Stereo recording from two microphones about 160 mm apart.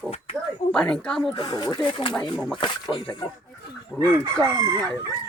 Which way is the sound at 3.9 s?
25° right (ahead or behind).